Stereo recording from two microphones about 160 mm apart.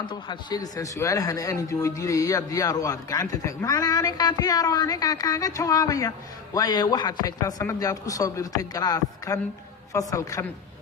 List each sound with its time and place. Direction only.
0.1 s speech: 25° left (ahead or behind)